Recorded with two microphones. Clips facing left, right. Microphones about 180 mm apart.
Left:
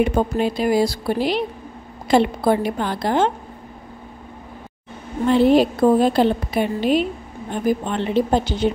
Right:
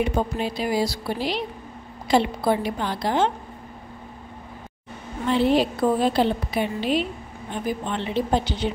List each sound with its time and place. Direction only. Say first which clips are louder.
0.0 s a woman's voice: left 5 dB; 50° left (ahead or behind)
5.3 s a woman's voice: left 5 dB; 45° left (ahead or behind)